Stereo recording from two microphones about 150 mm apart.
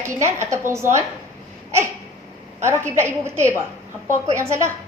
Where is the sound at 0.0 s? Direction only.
20° right (ahead or behind).